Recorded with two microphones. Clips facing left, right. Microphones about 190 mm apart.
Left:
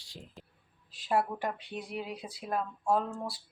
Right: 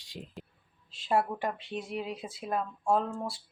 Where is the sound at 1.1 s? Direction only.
Centre (ahead or behind).